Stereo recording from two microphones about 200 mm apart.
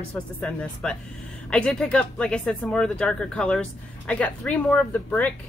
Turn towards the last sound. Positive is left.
turn(degrees=5)  # may be behind; listen again after turning